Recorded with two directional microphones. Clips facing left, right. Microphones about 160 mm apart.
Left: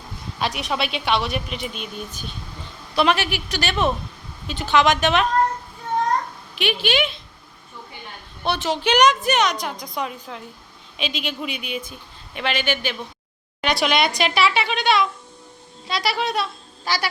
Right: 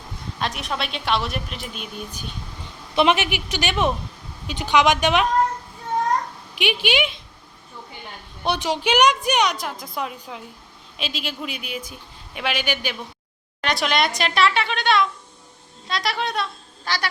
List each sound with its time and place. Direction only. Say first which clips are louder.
0.3 s speech: left 3 dB; centre (ahead or behind)
2.9 s a woman's voice: right 1 dB; 20° right (ahead or behind)
6.6 s a woman's voice: even; 15° right (ahead or behind)
8.4 s a woman's voice: even; 15° right (ahead or behind)
13.6 s a woman's voice: left 2 dB; centre (ahead or behind)